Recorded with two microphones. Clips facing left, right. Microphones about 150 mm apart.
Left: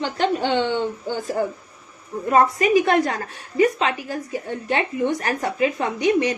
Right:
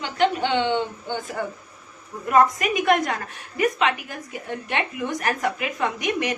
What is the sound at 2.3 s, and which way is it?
A woman's voice, 30° left (ahead or behind).